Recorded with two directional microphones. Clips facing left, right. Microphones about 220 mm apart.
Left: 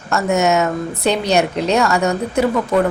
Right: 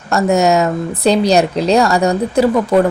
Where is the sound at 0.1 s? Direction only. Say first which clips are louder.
Right 3 dB; 35° right (ahead or behind).